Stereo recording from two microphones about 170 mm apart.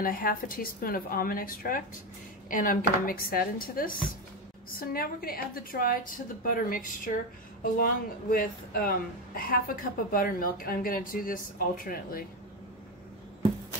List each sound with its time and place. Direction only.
0.0 s a woman's voice: 60° left (ahead or behind)